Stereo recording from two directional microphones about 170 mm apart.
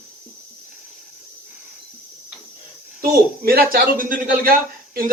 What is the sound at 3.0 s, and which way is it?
A man's voice, 60° right (ahead or behind).